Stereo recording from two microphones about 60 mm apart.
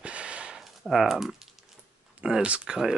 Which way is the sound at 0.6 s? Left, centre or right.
Centre.